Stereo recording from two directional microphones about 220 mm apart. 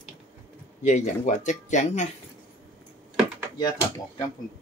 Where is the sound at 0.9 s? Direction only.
35° left (ahead or behind).